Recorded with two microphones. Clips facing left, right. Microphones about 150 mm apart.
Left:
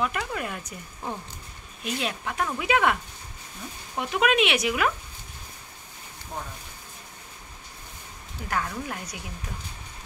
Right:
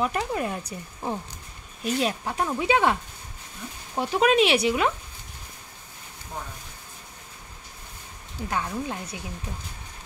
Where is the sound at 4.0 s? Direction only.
30° right (ahead or behind).